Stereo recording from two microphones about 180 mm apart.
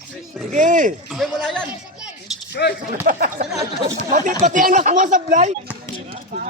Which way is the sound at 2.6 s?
65° left (ahead or behind).